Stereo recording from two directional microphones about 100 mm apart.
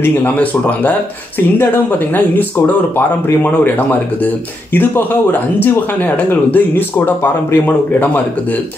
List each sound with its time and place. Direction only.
0.0 s speech: 20° left (ahead or behind)